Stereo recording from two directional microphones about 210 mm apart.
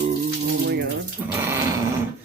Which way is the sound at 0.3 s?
50° right (ahead or behind).